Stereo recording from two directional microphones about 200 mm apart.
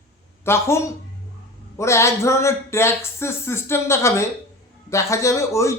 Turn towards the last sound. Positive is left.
turn(degrees=15)  # may be behind; listen again after turning